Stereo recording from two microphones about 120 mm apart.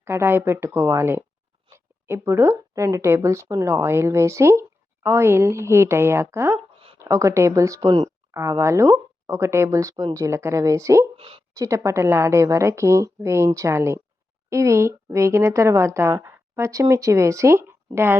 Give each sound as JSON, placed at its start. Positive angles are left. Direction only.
{"t": 0.0, "sound": "speech", "side_deg": -20}
{"t": 11.2, "sound": "a sound", "side_deg": -50}
{"t": 11.5, "sound": "speech", "side_deg": -25}